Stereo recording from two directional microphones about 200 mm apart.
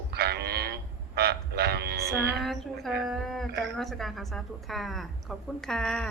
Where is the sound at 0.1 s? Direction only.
55° right (ahead or behind).